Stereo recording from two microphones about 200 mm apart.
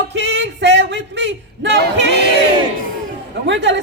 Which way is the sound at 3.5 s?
60° right (ahead or behind).